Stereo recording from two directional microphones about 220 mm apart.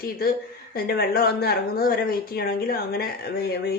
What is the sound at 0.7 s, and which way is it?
Speech, 45° left (ahead or behind).